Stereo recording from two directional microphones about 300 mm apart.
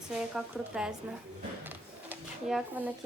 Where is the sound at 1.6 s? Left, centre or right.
Centre.